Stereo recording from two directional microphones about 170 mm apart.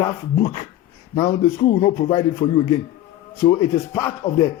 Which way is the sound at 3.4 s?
15° left (ahead or behind).